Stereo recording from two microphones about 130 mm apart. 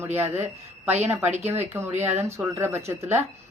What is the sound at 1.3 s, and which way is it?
Speech, 60° right (ahead or behind).